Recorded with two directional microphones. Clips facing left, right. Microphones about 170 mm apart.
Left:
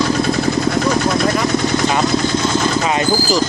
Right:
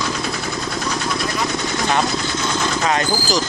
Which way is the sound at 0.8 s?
50° left (ahead or behind).